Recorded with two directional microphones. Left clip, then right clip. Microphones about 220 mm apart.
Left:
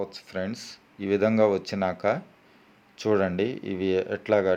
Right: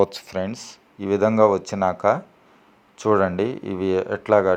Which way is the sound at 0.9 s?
Centre (ahead or behind).